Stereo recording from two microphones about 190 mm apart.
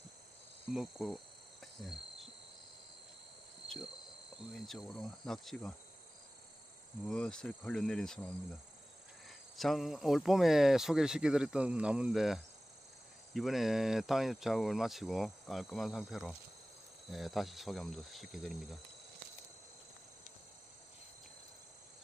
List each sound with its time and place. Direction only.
0.7 s speech: centre (ahead or behind)
1.6 s cricket: centre (ahead or behind)
4.5 s speech: centre (ahead or behind)
7.0 s speech: 5° left (ahead or behind)
9.6 s speech: centre (ahead or behind)